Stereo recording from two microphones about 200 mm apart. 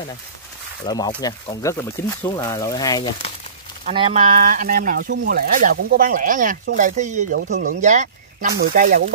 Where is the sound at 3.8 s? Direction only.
30° right (ahead or behind).